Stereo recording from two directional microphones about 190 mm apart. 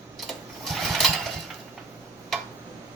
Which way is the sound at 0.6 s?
Centre (ahead or behind).